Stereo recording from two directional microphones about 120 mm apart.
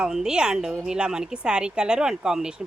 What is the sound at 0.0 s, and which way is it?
A woman's voice, 5° right (ahead or behind).